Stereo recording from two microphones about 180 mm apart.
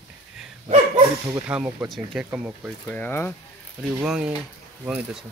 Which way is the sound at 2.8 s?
10° left (ahead or behind).